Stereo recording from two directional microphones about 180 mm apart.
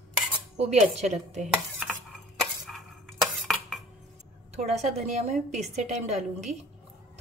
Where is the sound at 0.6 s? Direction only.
35° right (ahead or behind).